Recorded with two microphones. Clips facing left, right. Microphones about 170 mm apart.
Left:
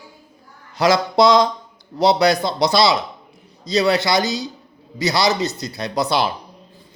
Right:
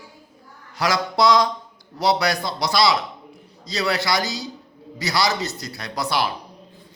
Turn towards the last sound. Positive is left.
turn(degrees=25)  # may be behind; listen again after turning